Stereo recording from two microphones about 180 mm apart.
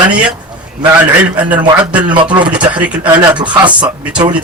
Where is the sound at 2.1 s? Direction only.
25° right (ahead or behind).